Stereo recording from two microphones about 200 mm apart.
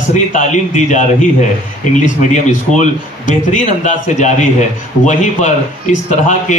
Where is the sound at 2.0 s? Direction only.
35° left (ahead or behind).